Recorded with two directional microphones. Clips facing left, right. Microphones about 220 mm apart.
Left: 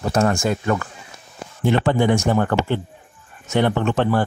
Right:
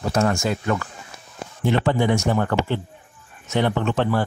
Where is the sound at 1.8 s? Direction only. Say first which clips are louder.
Left 2 dB; 55° left (ahead or behind).